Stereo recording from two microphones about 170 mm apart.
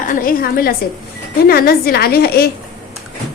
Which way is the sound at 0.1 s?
55° left (ahead or behind).